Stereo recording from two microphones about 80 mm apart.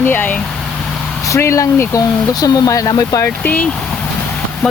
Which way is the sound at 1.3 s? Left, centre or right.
Left.